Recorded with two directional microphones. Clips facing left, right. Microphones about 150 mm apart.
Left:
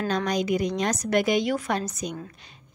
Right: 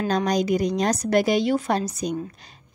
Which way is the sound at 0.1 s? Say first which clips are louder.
Right 4 dB; 40° right (ahead or behind).